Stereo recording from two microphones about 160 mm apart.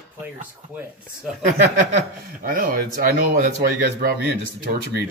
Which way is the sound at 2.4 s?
60° right (ahead or behind).